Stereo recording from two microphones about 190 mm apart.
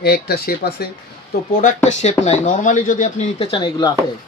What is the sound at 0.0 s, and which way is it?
Speech, 55° left (ahead or behind).